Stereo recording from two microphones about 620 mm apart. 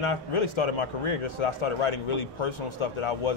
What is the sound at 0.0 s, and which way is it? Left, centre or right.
A man's voice, left.